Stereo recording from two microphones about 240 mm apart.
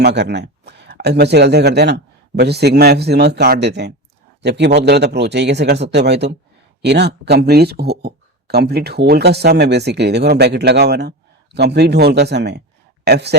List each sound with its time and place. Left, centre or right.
0.0 s speech: right